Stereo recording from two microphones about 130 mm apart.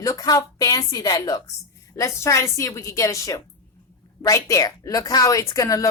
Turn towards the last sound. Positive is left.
turn(degrees=25)  # may be behind; listen again after turning